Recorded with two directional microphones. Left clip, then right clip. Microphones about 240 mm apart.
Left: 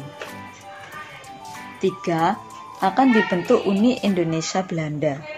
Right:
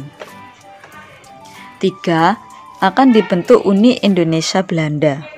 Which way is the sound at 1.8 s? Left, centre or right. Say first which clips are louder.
Right 7 dB; right.